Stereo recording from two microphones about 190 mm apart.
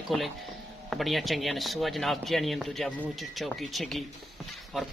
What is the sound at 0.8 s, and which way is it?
Speech, centre (ahead or behind).